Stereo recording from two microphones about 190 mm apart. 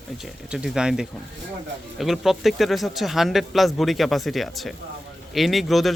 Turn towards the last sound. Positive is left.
turn(degrees=0)  # may be behind; listen again after turning